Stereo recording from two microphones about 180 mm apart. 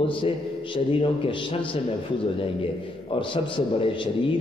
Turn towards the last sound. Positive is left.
turn(degrees=30)  # may be behind; listen again after turning